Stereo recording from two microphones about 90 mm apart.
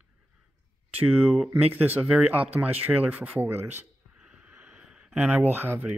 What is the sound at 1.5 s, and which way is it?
Speech, 20° right (ahead or behind).